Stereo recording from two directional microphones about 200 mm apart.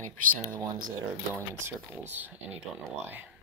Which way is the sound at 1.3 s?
10° right (ahead or behind).